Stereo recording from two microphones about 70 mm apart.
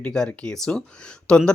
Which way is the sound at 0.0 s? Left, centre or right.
Centre.